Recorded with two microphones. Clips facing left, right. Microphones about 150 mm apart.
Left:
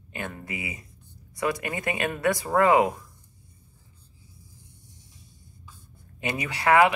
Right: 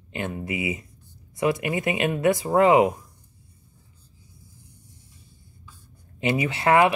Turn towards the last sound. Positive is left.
turn(degrees=-25)  # may be behind; listen again after turning